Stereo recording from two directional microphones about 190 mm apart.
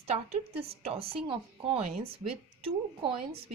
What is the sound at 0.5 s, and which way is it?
Speech, 55° right (ahead or behind).